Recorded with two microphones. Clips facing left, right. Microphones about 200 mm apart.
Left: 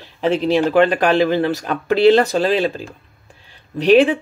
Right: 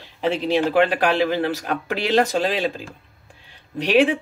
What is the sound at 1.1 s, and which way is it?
Speech, 10° right (ahead or behind).